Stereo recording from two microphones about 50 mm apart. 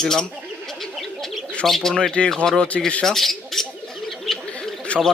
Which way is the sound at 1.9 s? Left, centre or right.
Centre.